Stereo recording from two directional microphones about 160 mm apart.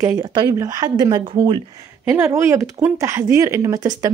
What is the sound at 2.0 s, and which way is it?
Speech, 15° right (ahead or behind).